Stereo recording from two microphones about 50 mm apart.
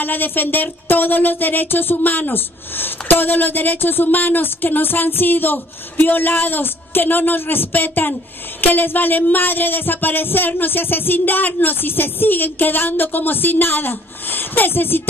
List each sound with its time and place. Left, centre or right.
0.0 s speech: left